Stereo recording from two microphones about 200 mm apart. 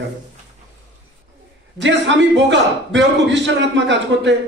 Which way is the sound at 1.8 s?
65° right (ahead or behind).